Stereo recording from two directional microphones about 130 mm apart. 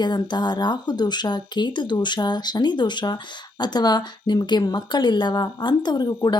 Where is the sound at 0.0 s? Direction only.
35° left (ahead or behind).